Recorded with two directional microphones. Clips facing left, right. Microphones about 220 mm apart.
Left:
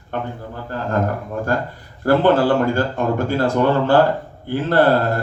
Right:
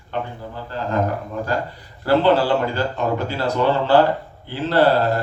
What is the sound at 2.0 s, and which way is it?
A man's voice, 50° left (ahead or behind).